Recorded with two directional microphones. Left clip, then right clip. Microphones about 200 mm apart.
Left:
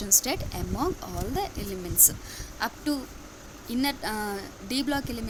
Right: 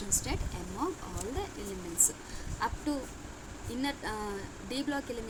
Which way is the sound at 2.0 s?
40° left (ahead or behind).